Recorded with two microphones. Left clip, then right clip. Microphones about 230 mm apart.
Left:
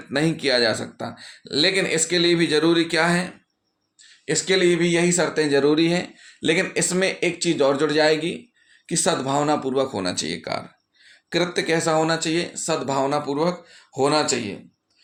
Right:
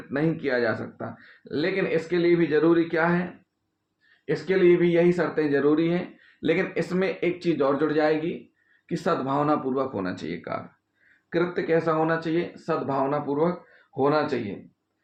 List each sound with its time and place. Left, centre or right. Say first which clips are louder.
0.1 s speech: left 5 dB; left
4.3 s speech: left 1 dB; left